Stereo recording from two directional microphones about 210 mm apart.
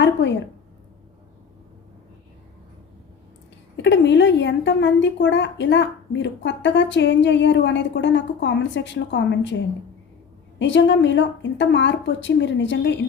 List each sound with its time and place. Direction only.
0.0 s a woman's voice: 55° left (ahead or behind)
3.8 s a woman's voice: 55° left (ahead or behind)
10.6 s a woman's voice: 60° left (ahead or behind)